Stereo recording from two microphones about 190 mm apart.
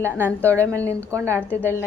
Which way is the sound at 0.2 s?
10° left (ahead or behind).